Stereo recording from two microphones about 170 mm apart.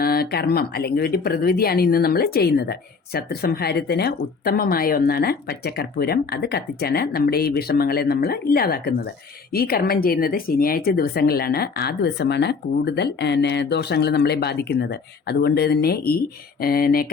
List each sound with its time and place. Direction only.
0.0 s speech: 65° left (ahead or behind)